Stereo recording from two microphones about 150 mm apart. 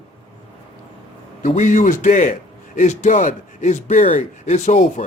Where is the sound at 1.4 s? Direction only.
55° left (ahead or behind).